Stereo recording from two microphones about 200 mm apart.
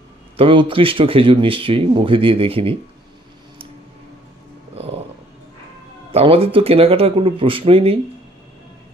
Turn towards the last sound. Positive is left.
turn(degrees=-30)  # may be behind; listen again after turning